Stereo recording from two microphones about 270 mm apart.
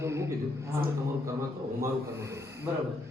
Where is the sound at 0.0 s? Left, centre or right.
Centre.